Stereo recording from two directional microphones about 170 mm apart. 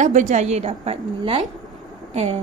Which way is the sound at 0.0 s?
45° right (ahead or behind).